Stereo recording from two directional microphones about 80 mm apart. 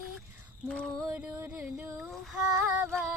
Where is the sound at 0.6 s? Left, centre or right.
Centre.